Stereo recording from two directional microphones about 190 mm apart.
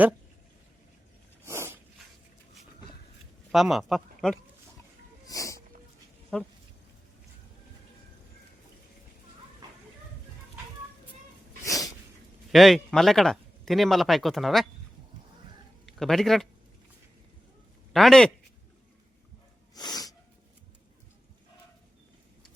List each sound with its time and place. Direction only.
1.5 s dog: 15° right (ahead or behind)
3.5 s speech: centre (ahead or behind)
5.2 s a sound: 20° left (ahead or behind)
6.3 s a man's voice: 5° left (ahead or behind)
11.6 s sneeze: 15° left (ahead or behind)
12.5 s a man's voice: centre (ahead or behind)
15.9 s speech: centre (ahead or behind)
17.9 s a man's voice: centre (ahead or behind)
19.7 s sneeze: 20° left (ahead or behind)